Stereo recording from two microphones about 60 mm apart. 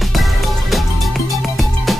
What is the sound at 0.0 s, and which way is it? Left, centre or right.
Music, centre.